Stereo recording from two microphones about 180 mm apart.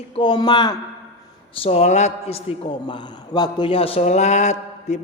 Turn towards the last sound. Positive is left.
turn(degrees=40)  # may be behind; listen again after turning